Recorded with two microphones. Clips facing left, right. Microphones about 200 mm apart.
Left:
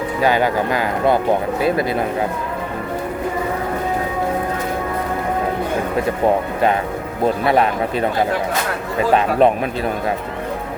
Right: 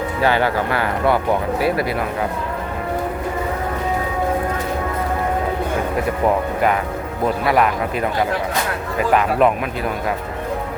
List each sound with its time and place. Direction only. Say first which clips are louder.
0.2 s speech: left 1 dB; 15° left (ahead or behind)
6.2 s speech: left 1 dB; 25° left (ahead or behind)